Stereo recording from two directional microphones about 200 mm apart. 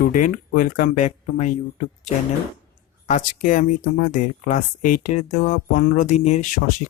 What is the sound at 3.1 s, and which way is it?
Speech, 40° left (ahead or behind).